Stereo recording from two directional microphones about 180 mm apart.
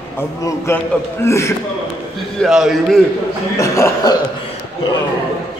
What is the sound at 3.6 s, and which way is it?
Speech, 15° left (ahead or behind).